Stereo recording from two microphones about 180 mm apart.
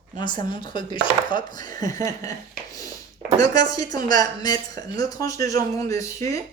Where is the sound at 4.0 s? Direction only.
45° right (ahead or behind).